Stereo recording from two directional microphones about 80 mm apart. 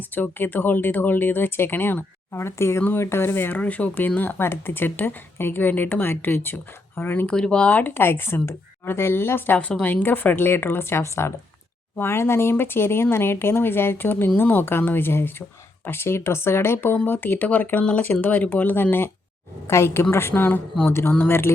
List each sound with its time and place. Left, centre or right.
0.1 s speech: left
7.3 s speech: centre; by 21.5 s left